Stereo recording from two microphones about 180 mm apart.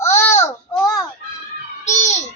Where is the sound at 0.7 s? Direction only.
20° left (ahead or behind).